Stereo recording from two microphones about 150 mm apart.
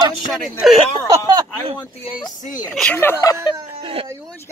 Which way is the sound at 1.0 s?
25° right (ahead or behind).